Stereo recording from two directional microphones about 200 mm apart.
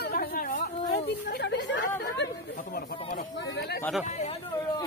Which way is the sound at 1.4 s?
60° left (ahead or behind).